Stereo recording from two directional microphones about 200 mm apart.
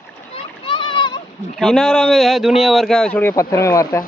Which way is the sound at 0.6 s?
25° left (ahead or behind).